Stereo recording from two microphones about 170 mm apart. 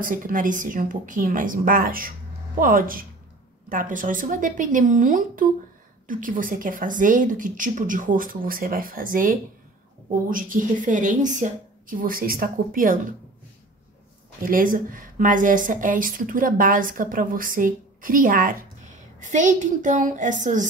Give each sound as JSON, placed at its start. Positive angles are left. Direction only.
{"t": 0.0, "sound": "a woman's voice", "side_deg": -55}
{"t": 14.4, "sound": "a woman's voice", "side_deg": -55}